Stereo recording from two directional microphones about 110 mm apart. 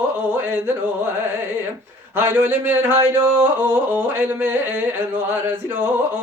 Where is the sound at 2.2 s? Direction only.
20° right (ahead or behind).